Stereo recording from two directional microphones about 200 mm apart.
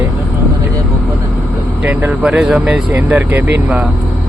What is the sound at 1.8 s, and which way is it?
Speech, 10° right (ahead or behind).